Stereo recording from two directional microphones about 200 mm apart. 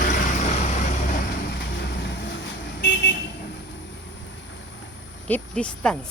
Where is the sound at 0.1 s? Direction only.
35° left (ahead or behind).